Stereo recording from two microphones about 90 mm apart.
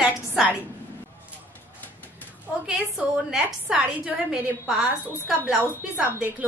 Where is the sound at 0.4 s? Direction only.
10° right (ahead or behind).